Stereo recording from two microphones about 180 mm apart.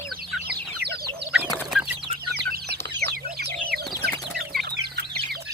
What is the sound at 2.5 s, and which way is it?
Chicken, 65° right (ahead or behind).